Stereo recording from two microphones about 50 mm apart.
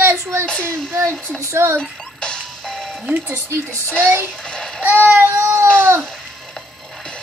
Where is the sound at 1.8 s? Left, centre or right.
Centre.